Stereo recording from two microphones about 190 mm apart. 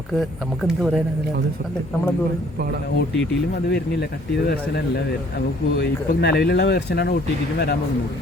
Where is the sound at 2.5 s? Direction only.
55° right (ahead or behind).